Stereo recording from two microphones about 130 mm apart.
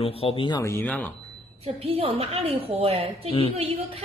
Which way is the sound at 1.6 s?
50° right (ahead or behind).